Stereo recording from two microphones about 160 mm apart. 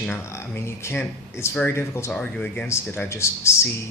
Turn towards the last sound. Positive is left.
turn(degrees=15)  # may be behind; listen again after turning